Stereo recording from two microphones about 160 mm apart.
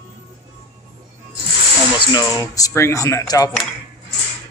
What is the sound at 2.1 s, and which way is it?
Speech, 25° left (ahead or behind).